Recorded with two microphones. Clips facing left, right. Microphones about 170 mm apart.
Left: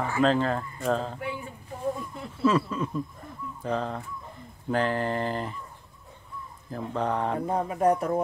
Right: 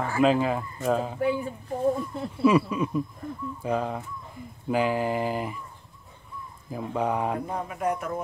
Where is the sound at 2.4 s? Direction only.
15° right (ahead or behind).